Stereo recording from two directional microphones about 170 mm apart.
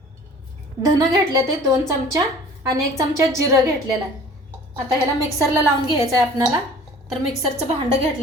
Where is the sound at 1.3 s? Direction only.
20° right (ahead or behind).